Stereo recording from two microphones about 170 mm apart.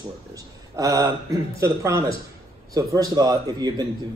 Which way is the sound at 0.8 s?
20° right (ahead or behind).